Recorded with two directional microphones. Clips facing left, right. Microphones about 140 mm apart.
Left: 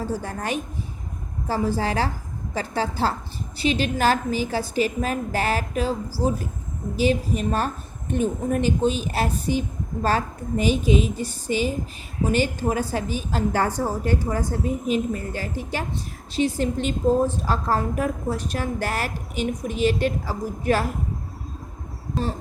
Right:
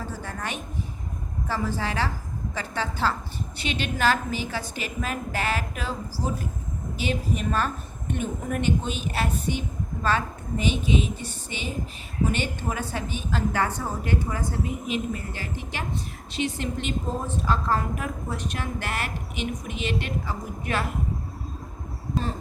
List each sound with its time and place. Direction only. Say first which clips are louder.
0.0 s a woman's voice: left 6 dB; 35° left (ahead or behind)
6.9 s a woman's voice: left 6 dB; 40° left (ahead or behind)